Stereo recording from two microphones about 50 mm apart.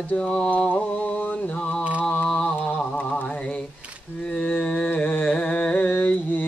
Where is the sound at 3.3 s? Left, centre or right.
Left.